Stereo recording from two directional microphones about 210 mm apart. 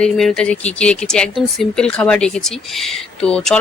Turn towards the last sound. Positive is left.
turn(degrees=5)  # may be behind; listen again after turning